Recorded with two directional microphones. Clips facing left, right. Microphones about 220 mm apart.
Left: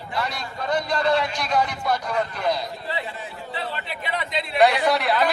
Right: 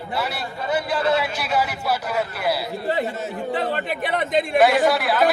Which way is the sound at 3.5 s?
50° right (ahead or behind).